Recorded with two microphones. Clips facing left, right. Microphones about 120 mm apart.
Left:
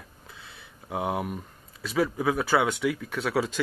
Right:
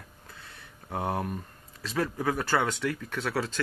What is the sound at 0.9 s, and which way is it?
Speech, 10° left (ahead or behind).